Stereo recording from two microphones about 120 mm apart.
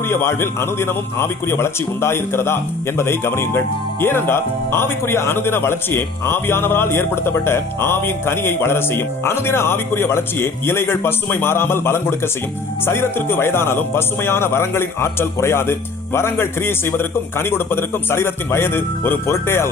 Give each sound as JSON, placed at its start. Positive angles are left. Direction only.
{"t": 0.1, "sound": "speech", "side_deg": 20}